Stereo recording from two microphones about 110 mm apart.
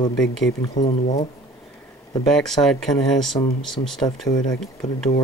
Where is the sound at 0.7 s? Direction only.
90° left.